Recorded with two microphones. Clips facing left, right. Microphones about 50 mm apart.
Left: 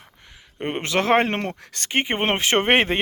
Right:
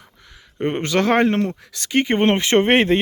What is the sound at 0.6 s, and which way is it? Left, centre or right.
Speech, centre.